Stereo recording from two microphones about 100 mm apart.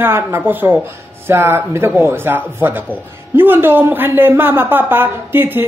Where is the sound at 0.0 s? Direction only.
25° right (ahead or behind).